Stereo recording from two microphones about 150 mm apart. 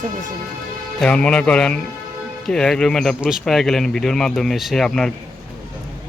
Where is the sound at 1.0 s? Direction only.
10° left (ahead or behind).